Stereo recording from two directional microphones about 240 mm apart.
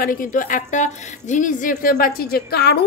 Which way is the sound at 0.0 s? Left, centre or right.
Left.